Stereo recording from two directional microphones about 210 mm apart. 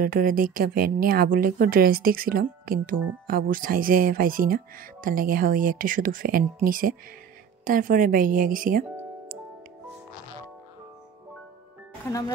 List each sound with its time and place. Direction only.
0.0 s speech: 40° right (ahead or behind)